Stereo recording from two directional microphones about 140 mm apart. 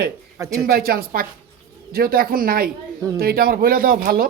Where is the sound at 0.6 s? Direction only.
90° right.